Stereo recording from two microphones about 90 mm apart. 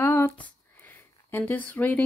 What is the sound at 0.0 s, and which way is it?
Speech, 25° left (ahead or behind).